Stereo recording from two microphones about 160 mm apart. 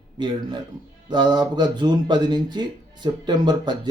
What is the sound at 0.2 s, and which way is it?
Speech, 30° right (ahead or behind).